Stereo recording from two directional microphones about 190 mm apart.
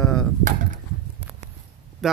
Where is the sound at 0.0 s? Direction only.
5° left (ahead or behind).